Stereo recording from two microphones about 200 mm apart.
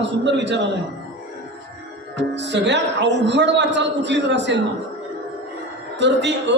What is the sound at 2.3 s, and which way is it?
A man's voice, 60° right (ahead or behind).